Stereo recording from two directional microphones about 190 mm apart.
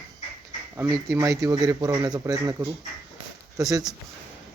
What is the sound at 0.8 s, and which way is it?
Speech, 15° right (ahead or behind).